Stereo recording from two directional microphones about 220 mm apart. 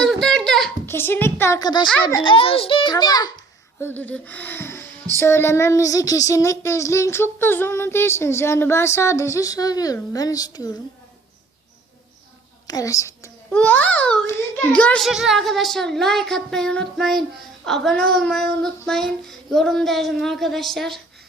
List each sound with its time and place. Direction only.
0.0 s a sound: 5° left (ahead or behind); by 1.9 s 20° left (ahead or behind)
1.9 s child singing: 5° left (ahead or behind)
2.2 s a child's voice: 25° left (ahead or behind)
5.1 s child singing: 10° left (ahead or behind)
12.6 s a child's voice: 15° left (ahead or behind)